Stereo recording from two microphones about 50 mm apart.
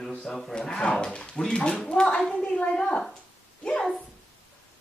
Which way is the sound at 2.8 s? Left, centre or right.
Centre.